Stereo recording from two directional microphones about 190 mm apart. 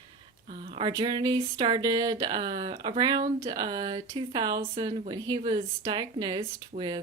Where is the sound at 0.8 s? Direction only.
25° right (ahead or behind).